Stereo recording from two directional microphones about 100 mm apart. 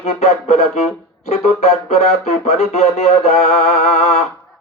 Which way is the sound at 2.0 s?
90° left.